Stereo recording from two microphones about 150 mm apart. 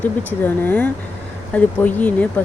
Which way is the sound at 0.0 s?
10° left (ahead or behind).